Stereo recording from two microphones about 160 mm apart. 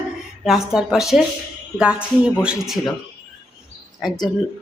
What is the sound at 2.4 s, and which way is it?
Speech, centre (ahead or behind).